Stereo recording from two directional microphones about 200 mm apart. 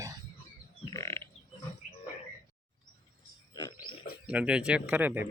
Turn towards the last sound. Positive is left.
turn(degrees=-10)  # may be behind; listen again after turning